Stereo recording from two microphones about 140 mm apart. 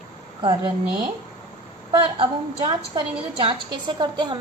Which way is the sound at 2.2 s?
40° right (ahead or behind).